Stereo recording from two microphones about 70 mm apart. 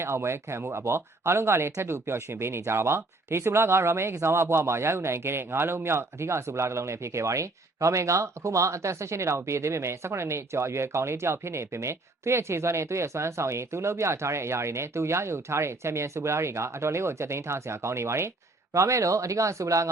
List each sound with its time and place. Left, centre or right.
0.0 s speech: right